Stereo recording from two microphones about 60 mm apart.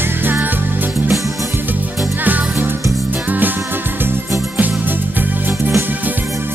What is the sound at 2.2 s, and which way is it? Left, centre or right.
Music, right.